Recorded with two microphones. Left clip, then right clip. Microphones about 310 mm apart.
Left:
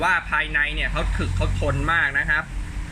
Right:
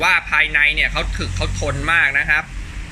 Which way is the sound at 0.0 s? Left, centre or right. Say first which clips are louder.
Right 6 dB; centre.